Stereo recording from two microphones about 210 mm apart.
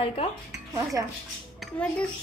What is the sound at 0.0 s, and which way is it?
Speech, 30° left (ahead or behind).